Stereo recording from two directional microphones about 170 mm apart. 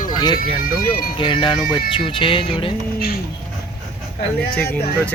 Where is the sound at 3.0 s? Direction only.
65° left (ahead or behind).